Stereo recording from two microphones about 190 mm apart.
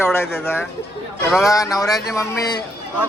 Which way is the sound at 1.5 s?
20° left (ahead or behind).